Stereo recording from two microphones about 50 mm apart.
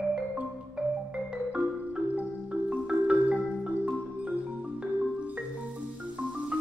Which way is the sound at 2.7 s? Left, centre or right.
Right.